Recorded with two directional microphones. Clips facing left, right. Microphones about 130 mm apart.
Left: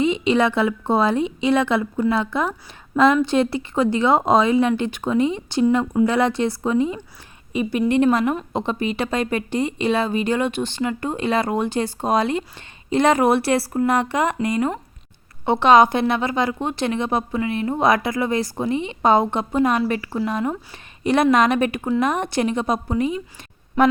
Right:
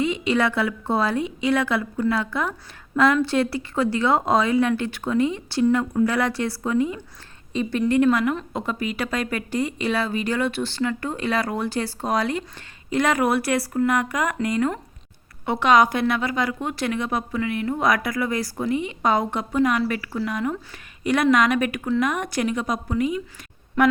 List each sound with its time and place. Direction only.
0.0 s a woman's voice: 20° left (ahead or behind)
7.5 s a woman's voice: 10° left (ahead or behind); by 23.2 s 30° left (ahead or behind)